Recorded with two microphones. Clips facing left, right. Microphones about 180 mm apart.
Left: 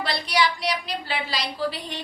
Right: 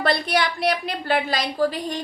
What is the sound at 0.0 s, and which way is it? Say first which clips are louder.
A woman's voice: right 3 dB; 50° right (ahead or behind).